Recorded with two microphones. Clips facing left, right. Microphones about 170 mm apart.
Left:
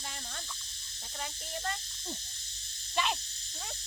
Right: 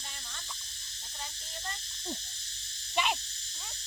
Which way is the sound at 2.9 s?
10° right (ahead or behind).